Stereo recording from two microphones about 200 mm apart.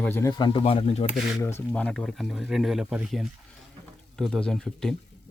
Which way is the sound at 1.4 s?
10° left (ahead or behind).